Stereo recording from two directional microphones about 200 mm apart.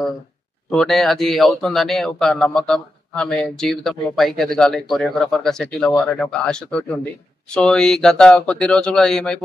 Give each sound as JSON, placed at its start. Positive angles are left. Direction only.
{"t": 0.7, "sound": "a man's voice", "side_deg": 0}